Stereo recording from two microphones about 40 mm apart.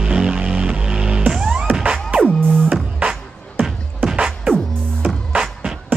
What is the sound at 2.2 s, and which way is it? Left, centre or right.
Music, left.